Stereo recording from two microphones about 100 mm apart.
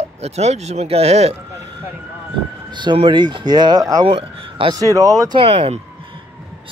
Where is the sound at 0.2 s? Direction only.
90° right.